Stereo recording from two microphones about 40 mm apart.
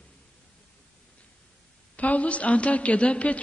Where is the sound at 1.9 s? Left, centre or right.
Left.